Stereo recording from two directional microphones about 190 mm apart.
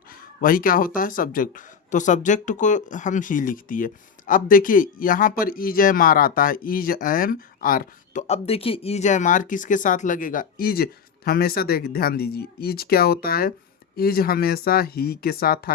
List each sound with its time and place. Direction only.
0.1 s speech: 50° left (ahead or behind)